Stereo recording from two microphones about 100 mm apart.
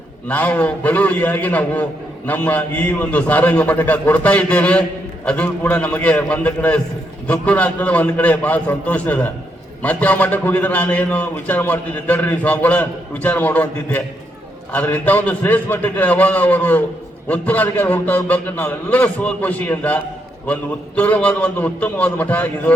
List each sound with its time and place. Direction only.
0.3 s a man's voice: 15° left (ahead or behind)